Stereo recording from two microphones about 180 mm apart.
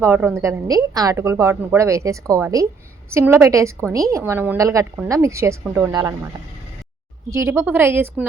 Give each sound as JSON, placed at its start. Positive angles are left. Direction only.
{"t": 0.0, "sound": "a woman's voice", "side_deg": -10}
{"t": 7.3, "sound": "a woman's voice", "side_deg": -15}